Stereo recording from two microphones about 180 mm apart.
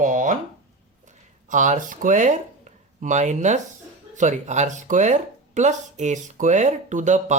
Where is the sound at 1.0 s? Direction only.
45° right (ahead or behind).